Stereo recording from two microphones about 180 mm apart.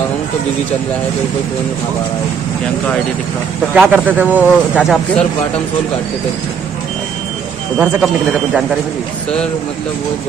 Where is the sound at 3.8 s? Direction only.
10° right (ahead or behind).